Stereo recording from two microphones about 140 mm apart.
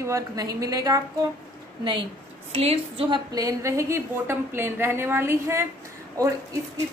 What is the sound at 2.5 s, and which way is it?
Speech, 40° right (ahead or behind).